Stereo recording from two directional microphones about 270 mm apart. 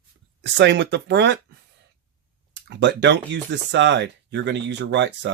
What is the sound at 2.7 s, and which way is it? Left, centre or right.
Speech, right.